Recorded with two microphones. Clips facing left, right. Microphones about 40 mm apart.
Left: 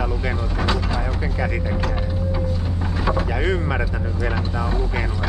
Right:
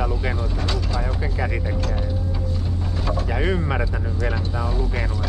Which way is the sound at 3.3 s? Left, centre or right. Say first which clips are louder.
Left 1 dB; centre.